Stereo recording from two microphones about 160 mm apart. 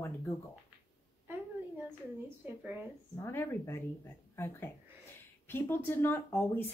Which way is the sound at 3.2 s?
15° left (ahead or behind).